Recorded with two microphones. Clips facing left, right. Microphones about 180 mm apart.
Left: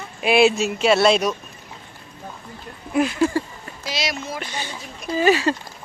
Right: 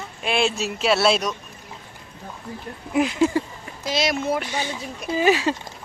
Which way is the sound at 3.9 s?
50° right (ahead or behind).